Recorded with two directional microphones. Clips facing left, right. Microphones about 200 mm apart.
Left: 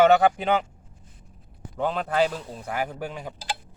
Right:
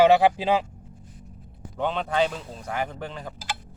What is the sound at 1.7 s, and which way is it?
Speech, centre (ahead or behind).